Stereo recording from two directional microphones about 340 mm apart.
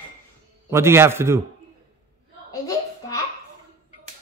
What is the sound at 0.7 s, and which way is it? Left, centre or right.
Speech, centre.